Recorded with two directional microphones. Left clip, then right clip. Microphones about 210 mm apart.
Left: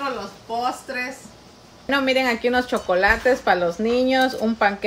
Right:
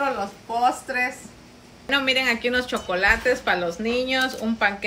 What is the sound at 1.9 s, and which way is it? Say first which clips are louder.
A woman's voice: left 1 dB; 45° left (ahead or behind).